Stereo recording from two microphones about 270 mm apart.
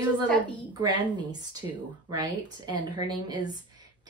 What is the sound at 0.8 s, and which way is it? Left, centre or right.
A woman's voice, centre.